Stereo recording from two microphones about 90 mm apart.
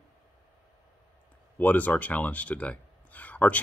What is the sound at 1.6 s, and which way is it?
Speech, 20° left (ahead or behind).